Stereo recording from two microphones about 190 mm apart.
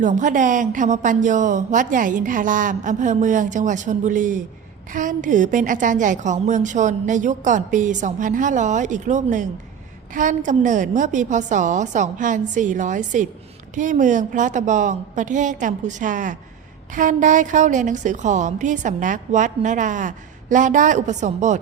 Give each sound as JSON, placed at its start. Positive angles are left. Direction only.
{"t": 0.0, "sound": "a woman's voice", "side_deg": -40}